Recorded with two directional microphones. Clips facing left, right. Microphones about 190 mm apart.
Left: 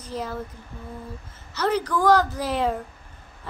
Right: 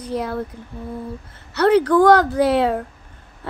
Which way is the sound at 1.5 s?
65° right (ahead or behind).